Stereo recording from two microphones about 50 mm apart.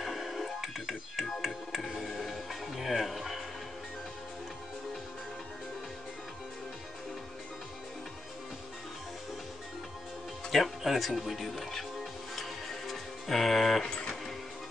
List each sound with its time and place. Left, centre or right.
0.0 s music: centre
10.5 s music: centre
13.8 s music: centre